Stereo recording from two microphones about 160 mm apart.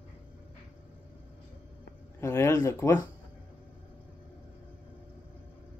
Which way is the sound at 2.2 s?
20° left (ahead or behind).